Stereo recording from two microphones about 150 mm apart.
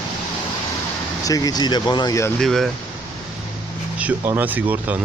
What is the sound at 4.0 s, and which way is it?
Speech, 10° right (ahead or behind).